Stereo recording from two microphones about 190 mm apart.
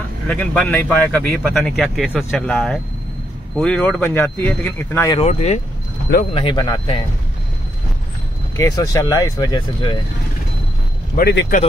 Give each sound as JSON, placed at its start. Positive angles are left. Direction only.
{"t": 0.3, "sound": "speech", "side_deg": 10}
{"t": 5.2, "sound": "speech", "side_deg": 35}
{"t": 6.3, "sound": "speech", "side_deg": 25}
{"t": 8.5, "sound": "speech", "side_deg": 15}
{"t": 11.1, "sound": "speech", "side_deg": 60}